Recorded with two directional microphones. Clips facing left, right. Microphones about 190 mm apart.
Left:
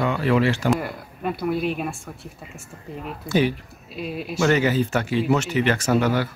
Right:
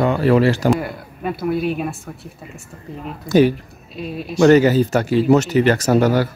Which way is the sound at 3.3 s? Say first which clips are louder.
Right 7 dB; 40° right (ahead or behind).